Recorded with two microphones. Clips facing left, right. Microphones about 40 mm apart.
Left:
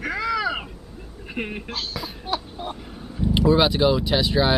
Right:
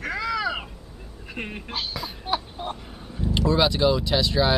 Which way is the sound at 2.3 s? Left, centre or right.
Centre.